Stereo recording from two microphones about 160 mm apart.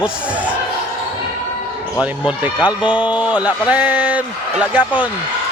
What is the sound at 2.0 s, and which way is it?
A man's voice, 10° right (ahead or behind).